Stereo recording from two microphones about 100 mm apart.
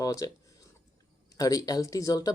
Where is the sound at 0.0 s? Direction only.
35° left (ahead or behind).